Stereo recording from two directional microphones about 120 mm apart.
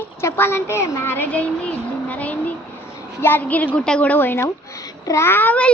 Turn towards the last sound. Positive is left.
turn(degrees=15)  # may be behind; listen again after turning